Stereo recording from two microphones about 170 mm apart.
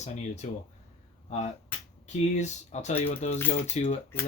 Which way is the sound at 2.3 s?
45° left (ahead or behind).